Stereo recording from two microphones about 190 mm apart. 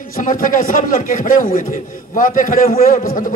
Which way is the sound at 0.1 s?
45° left (ahead or behind).